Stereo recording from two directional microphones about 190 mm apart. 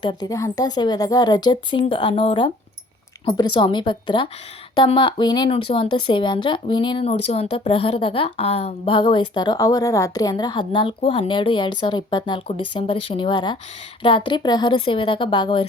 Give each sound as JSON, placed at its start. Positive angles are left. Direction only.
{"t": 0.0, "sound": "a woman's voice", "side_deg": 25}